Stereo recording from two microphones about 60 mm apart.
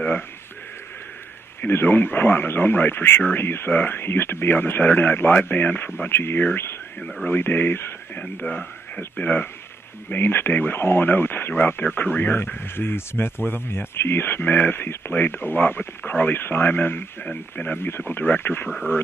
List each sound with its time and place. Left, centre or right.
1.7 s speech: left
8.2 s speech: centre
17.3 s speech: left
17.8 s speech: left